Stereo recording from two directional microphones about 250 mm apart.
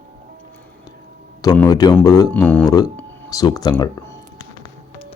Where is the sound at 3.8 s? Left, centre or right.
Centre.